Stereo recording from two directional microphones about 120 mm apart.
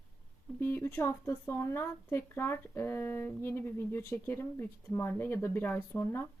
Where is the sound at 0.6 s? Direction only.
20° left (ahead or behind).